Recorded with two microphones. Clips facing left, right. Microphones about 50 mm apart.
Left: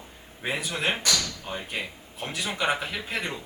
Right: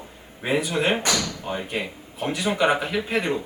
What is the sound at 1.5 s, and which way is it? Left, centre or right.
Speech, centre.